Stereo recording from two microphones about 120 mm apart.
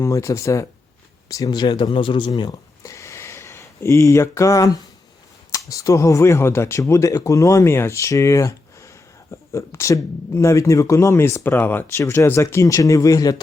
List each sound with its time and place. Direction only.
0.0 s speech: 25° left (ahead or behind)